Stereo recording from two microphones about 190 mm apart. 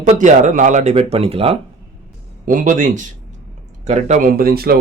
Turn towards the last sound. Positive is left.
turn(degrees=-55)  # may be behind; listen again after turning